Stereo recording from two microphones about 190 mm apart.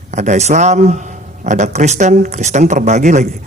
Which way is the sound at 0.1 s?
35° right (ahead or behind).